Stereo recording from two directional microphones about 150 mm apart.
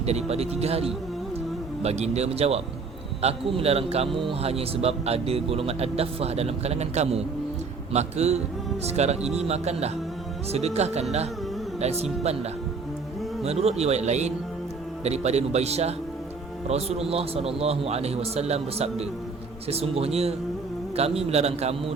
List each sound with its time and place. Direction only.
0.0 s a man's voice: 45° right (ahead or behind)